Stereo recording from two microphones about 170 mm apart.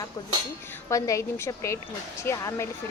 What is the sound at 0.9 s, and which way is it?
A woman's voice, 20° left (ahead or behind).